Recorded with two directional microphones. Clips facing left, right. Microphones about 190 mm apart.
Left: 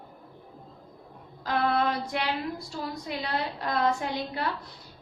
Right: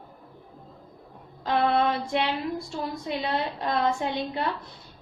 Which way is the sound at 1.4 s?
25° right (ahead or behind).